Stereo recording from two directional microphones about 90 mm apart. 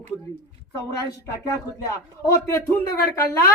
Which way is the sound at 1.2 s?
40° left (ahead or behind).